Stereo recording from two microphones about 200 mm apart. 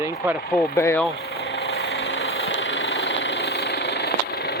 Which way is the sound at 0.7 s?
15° left (ahead or behind).